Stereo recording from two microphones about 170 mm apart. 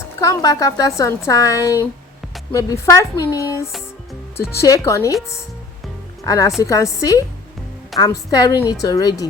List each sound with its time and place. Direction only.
0.2 s speech: 20° left (ahead or behind)
6.2 s speech: 20° left (ahead or behind)